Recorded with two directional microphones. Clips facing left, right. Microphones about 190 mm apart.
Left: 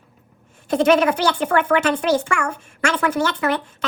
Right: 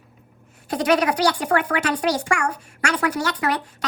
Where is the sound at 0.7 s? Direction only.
25° left (ahead or behind).